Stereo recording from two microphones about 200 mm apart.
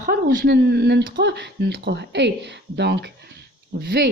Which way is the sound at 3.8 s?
45° right (ahead or behind).